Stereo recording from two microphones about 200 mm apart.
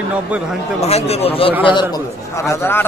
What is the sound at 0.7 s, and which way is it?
A man's voice, 30° left (ahead or behind).